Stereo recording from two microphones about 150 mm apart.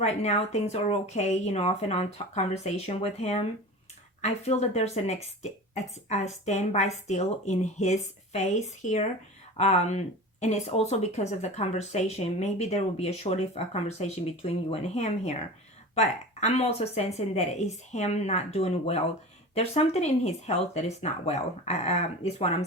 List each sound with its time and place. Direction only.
0.0 s speech: 45° left (ahead or behind)